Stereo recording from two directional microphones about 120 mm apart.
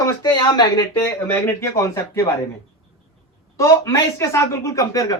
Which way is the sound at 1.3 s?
15° left (ahead or behind).